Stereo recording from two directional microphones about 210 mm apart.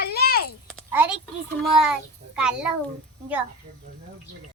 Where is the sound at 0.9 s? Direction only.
10° right (ahead or behind).